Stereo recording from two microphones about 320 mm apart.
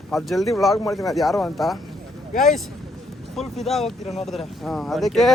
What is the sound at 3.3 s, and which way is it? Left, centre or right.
A man's voice, centre.